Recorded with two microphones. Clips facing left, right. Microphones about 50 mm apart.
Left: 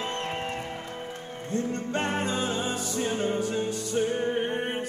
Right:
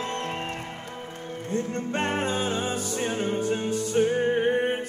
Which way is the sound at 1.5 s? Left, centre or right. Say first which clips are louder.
Right 1 dB; right.